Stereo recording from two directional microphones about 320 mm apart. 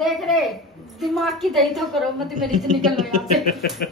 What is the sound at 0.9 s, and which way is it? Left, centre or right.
A woman's voice, centre.